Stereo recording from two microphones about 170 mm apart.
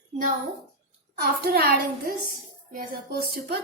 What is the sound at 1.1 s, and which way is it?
A woman's voice, 60° right (ahead or behind).